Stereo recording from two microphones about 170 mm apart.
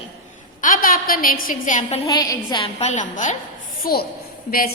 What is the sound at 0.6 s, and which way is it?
A woman's voice, 55° left (ahead or behind).